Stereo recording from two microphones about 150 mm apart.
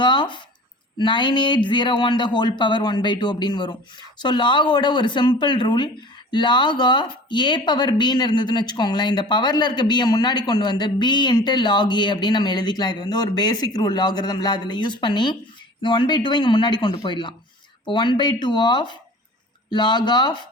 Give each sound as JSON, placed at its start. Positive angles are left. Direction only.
{"t": 0.0, "sound": "speech", "side_deg": 30}